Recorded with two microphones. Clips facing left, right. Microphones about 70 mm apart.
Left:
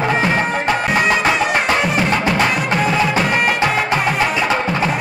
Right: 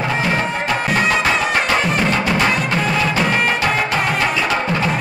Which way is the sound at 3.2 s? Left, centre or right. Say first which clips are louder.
Left 1 dB; centre.